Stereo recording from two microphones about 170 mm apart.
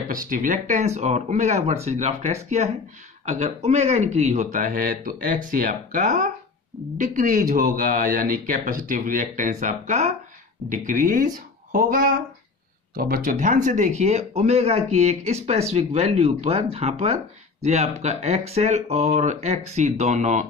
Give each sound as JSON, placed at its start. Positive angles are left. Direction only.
{"t": 0.1, "sound": "speech", "side_deg": -50}